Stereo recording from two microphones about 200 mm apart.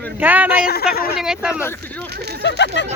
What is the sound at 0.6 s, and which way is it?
Speech, 50° left (ahead or behind).